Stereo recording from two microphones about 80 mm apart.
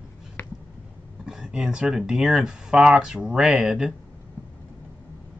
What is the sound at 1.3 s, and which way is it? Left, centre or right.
Speech, centre.